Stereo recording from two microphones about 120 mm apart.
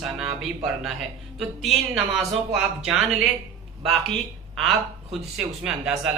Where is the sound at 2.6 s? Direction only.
5° right (ahead or behind).